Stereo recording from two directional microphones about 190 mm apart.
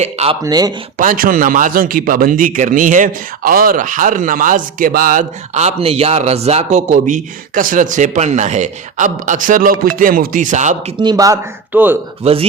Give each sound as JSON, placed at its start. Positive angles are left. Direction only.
{"t": 0.0, "sound": "speech", "side_deg": -35}
{"t": 0.4, "sound": "speech", "side_deg": -20}
{"t": 0.9, "sound": "speech", "side_deg": -45}
{"t": 11.0, "sound": "speech", "side_deg": -20}
{"t": 12.2, "sound": "speech", "side_deg": -30}